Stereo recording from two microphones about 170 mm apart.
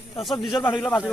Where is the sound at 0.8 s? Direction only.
10° left (ahead or behind).